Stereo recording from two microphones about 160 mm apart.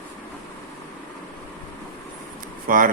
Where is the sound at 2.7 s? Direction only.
60° right (ahead or behind).